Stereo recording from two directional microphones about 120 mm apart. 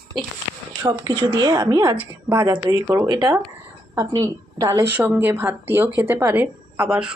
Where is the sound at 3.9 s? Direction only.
25° right (ahead or behind).